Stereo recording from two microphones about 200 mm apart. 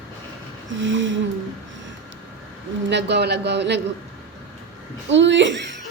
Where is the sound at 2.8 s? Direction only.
60° right (ahead or behind).